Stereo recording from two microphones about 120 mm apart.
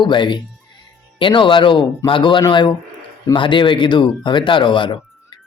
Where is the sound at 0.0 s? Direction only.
40° left (ahead or behind).